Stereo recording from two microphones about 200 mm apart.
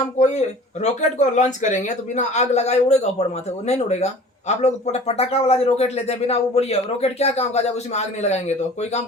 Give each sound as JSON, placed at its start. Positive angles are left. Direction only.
{"t": 0.2, "sound": "speech", "side_deg": 35}